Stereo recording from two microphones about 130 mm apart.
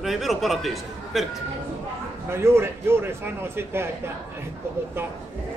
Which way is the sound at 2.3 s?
20° right (ahead or behind).